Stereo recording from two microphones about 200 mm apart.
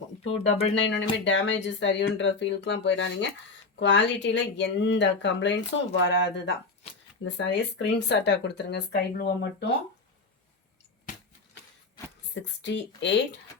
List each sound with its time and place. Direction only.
0.4 s speech: 30° left (ahead or behind)
0.8 s speech: 65° left (ahead or behind)
12.3 s speech: 65° left (ahead or behind)